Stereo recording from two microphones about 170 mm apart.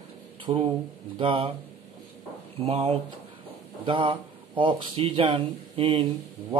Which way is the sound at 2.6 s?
35° right (ahead or behind).